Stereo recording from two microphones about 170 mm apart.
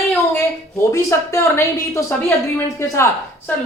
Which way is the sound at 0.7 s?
15° left (ahead or behind).